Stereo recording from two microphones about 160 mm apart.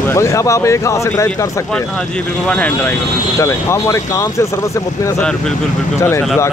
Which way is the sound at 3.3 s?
20° left (ahead or behind).